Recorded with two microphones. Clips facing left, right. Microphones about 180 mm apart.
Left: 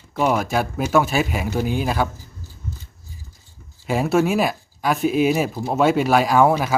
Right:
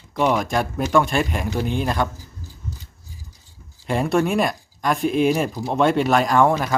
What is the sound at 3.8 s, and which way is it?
Speech, 5° left (ahead or behind).